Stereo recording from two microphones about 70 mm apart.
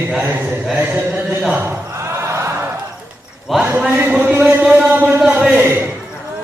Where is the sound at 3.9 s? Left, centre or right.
Right.